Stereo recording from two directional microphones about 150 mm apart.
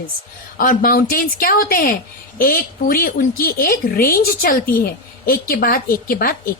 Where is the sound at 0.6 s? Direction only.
70° left (ahead or behind).